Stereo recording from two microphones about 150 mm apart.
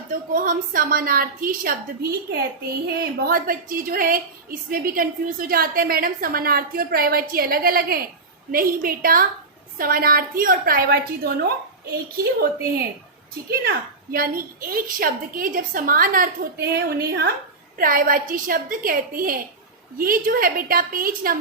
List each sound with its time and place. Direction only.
0.1 s a woman's voice: 70° right (ahead or behind)
3.2 s a woman's voice: 80° right
13.5 s a woman's voice: 85° right
17.7 s a woman's voice: 65° right (ahead or behind)